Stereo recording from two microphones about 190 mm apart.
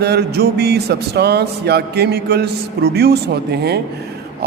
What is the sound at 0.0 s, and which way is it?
A man's voice, 60° right (ahead or behind).